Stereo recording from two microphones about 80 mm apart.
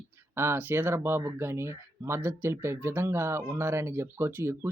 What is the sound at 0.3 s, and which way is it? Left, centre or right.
Speech, right.